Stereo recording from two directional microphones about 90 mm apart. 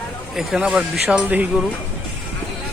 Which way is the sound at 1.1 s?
15° right (ahead or behind).